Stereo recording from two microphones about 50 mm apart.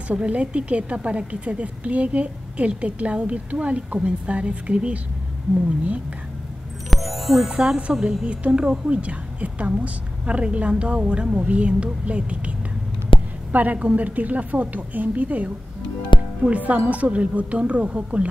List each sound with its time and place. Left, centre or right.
0.1 s a woman's voice: right
6.9 s music: centre
7.4 s a woman's voice: centre
7.9 s a woman's voice: centre
8.3 s a woman's voice: right